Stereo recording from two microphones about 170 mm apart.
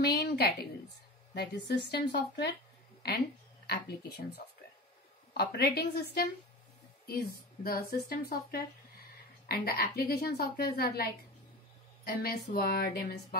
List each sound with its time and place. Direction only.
0.0 s a woman's voice: 70° left (ahead or behind)
7.6 s a woman's voice: 60° left (ahead or behind)